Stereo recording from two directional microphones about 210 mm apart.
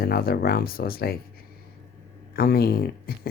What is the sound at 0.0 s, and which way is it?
Speech, 45° left (ahead or behind).